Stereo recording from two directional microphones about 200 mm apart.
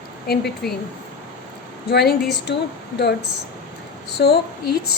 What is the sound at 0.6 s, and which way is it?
Speech, 50° left (ahead or behind).